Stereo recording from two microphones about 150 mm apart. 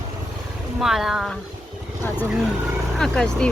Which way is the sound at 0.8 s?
Centre (ahead or behind).